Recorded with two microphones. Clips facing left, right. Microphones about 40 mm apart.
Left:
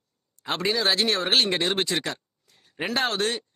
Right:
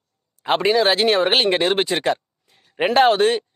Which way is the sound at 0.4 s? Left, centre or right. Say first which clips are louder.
Right 8 dB; right.